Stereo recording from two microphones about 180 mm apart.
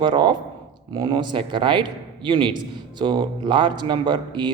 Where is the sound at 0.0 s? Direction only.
25° right (ahead or behind).